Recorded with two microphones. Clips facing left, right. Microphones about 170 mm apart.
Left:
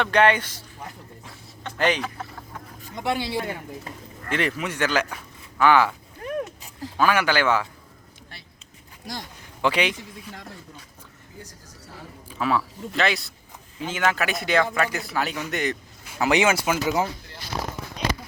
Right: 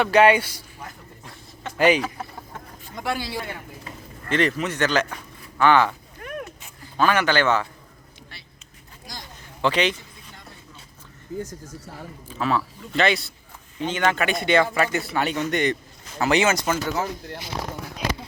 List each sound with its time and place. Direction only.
0.0 s speech: 10° right (ahead or behind)
1.2 s a sound: centre (ahead or behind)
2.9 s speech: 20° left (ahead or behind)
4.3 s speech: 10° left (ahead or behind)
6.2 s a sound: 30° left (ahead or behind)
6.9 s speech: 10° left (ahead or behind)
9.6 s a man's voice: 10° left (ahead or behind)
12.3 s a man's voice: 10° left (ahead or behind)
16.2 s speech: 15° left (ahead or behind)